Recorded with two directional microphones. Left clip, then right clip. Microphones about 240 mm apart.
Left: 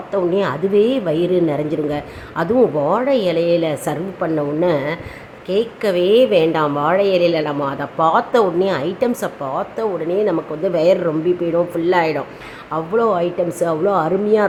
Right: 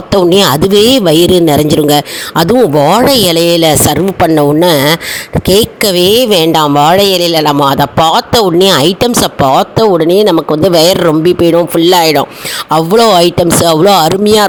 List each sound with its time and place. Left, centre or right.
0.1 s speech: right